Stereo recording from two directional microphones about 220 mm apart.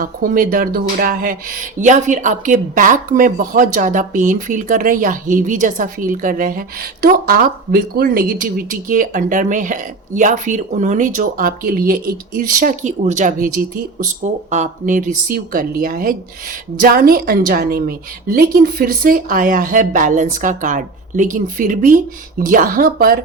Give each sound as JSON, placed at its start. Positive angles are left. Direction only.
{"t": 0.0, "sound": "speech", "side_deg": -40}